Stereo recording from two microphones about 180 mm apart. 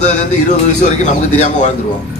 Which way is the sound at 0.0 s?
40° left (ahead or behind).